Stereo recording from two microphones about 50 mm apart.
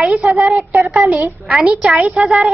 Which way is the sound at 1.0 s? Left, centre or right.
Right.